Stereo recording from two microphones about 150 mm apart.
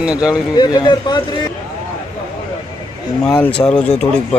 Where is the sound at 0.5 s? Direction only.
25° left (ahead or behind).